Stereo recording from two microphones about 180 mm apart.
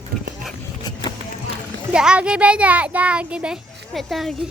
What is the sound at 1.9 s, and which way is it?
A child's voice, 5° right (ahead or behind).